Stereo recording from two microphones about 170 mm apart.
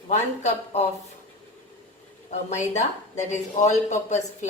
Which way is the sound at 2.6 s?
45° left (ahead or behind).